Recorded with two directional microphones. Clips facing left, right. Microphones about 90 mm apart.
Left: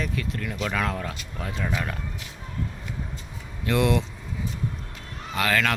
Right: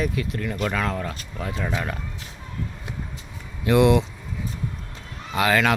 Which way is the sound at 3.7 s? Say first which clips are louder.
Right 6 dB; 15° right (ahead or behind).